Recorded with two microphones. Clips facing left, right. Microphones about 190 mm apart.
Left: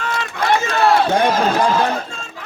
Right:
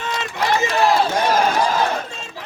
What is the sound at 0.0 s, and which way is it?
Run, 20° right (ahead or behind).